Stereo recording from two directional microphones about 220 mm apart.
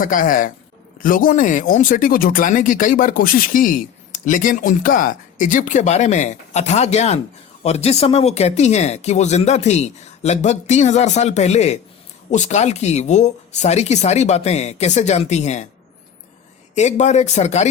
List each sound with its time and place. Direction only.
0.0 s speech: 40° left (ahead or behind)
16.7 s speech: 30° left (ahead or behind)